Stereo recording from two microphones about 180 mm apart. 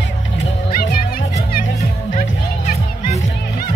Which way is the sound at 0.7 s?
55° left (ahead or behind).